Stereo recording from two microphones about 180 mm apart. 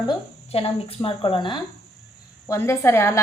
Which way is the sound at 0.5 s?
30° left (ahead or behind).